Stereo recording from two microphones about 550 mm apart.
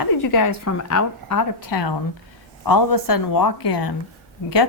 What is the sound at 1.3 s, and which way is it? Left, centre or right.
A woman's voice, left.